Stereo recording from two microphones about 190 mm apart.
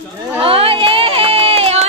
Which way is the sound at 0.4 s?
30° right (ahead or behind).